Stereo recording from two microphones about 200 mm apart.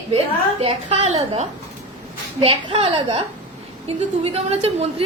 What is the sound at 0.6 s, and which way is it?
A woman's voice, 30° right (ahead or behind).